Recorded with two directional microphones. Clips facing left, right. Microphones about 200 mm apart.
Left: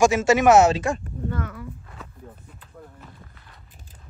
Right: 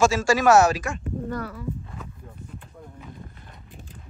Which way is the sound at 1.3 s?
35° right (ahead or behind).